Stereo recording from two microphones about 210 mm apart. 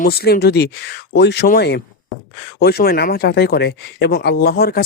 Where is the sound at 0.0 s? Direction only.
50° left (ahead or behind).